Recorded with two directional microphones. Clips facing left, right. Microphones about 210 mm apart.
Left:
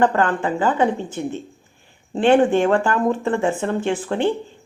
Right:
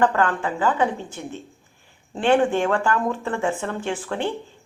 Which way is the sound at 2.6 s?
35° left (ahead or behind).